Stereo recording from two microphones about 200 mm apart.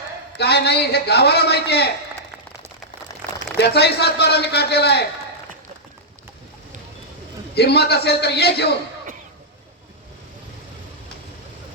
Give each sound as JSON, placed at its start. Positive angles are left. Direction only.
{"t": 0.3, "sound": "a man's voice", "side_deg": 55}
{"t": 3.6, "sound": "a man's voice", "side_deg": 55}
{"t": 7.5, "sound": "a man's voice", "side_deg": 55}